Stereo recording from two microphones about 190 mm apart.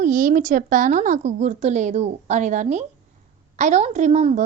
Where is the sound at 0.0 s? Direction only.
45° right (ahead or behind).